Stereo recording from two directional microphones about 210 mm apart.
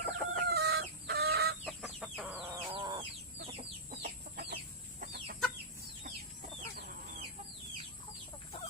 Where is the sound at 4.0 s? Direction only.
50° right (ahead or behind).